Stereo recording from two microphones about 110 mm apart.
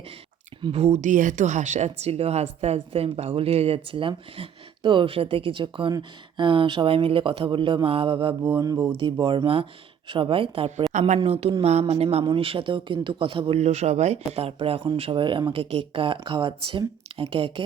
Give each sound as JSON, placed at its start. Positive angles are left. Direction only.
{"t": 0.7, "sound": "speech", "side_deg": -75}
{"t": 10.9, "sound": "a woman's voice", "side_deg": -90}
{"t": 11.2, "sound": "speech", "side_deg": -65}
{"t": 11.6, "sound": "speech", "side_deg": -75}
{"t": 12.0, "sound": "speech", "side_deg": -45}
{"t": 13.6, "sound": "speech", "side_deg": -75}
{"t": 15.5, "sound": "speech", "side_deg": -60}